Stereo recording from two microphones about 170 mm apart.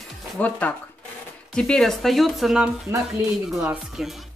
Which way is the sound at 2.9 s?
15° right (ahead or behind).